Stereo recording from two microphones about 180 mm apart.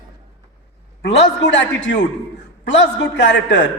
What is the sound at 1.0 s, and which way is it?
A man's voice, 75° left (ahead or behind).